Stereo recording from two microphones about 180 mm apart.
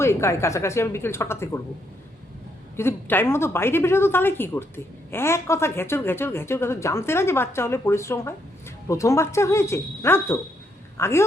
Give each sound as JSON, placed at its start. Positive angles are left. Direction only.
{"t": 0.0, "sound": "a woman's voice", "side_deg": 15}
{"t": 2.7, "sound": "a woman's voice", "side_deg": 10}